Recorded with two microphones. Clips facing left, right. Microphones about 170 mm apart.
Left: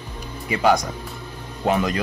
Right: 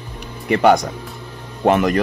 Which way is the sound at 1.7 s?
60° right (ahead or behind).